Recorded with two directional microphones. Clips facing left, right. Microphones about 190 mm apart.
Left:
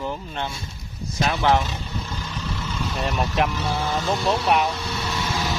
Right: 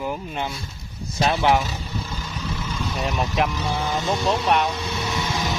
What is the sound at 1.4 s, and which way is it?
Vehicle, 10° right (ahead or behind).